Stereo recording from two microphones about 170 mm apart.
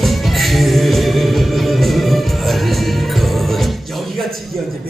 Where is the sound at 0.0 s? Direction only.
Centre (ahead or behind).